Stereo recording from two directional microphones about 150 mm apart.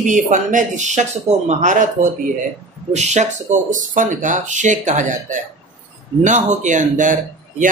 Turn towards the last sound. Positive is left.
turn(degrees=-60)  # may be behind; listen again after turning